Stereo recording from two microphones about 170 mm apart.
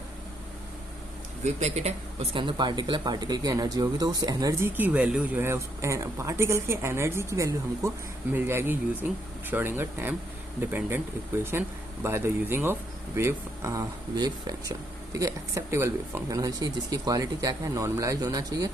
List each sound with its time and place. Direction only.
1.5 s speech: 40° right (ahead or behind); by 4.7 s 20° right (ahead or behind)
4.8 s a woman's voice: 10° right (ahead or behind)